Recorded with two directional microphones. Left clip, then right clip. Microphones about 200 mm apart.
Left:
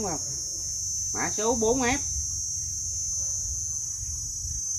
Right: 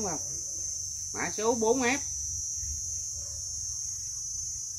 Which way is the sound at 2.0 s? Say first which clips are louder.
Left 4 dB; 45° left (ahead or behind).